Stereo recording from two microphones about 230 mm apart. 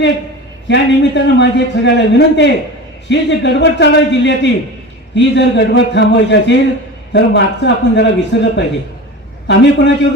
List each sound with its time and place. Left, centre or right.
0.7 s a man's voice: left